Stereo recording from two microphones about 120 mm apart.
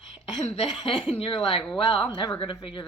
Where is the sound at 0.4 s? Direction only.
55° left (ahead or behind).